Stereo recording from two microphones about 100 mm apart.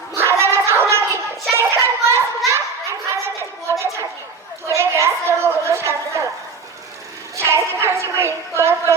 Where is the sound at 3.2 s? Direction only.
30° right (ahead or behind).